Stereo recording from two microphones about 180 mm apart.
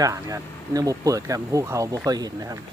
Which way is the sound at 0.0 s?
20° right (ahead or behind).